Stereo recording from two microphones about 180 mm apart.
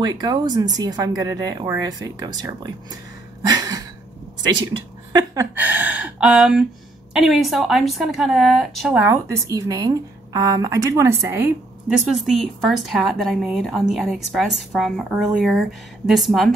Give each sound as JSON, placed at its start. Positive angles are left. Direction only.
{"t": 0.0, "sound": "speech", "side_deg": -20}
{"t": 3.4, "sound": "a sound", "side_deg": -20}
{"t": 5.1, "sound": "a woman's voice", "side_deg": -20}